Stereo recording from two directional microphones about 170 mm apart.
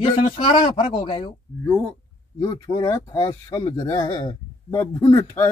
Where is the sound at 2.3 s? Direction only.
25° left (ahead or behind).